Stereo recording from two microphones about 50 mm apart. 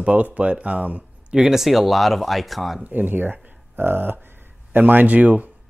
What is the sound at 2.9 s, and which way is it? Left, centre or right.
Speech, right.